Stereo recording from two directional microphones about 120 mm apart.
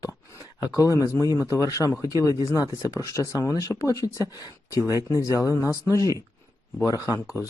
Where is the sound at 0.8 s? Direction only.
30° left (ahead or behind).